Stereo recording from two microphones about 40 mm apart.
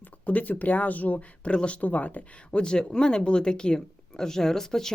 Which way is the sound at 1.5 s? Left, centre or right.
Left.